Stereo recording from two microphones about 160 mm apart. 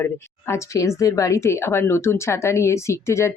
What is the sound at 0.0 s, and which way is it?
A woman's voice, 15° left (ahead or behind).